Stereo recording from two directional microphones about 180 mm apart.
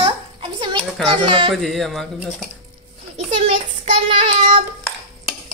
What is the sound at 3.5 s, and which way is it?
Child singing, 35° right (ahead or behind).